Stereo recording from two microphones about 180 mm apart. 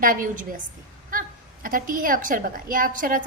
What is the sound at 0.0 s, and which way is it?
Speech, 50° right (ahead or behind).